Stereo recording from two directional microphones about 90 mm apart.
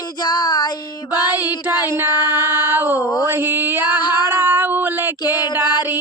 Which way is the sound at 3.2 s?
25° right (ahead or behind).